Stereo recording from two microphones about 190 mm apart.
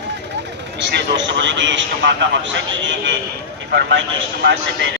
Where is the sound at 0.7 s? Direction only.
65° right (ahead or behind).